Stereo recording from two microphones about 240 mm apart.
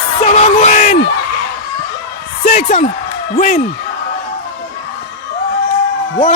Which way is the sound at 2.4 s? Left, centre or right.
Left.